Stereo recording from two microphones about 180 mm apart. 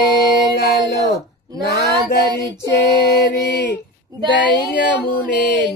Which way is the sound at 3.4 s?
70° left (ahead or behind).